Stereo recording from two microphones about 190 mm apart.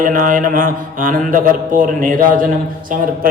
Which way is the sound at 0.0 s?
45° right (ahead or behind).